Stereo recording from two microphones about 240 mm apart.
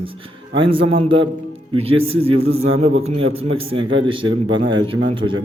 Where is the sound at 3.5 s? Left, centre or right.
Right.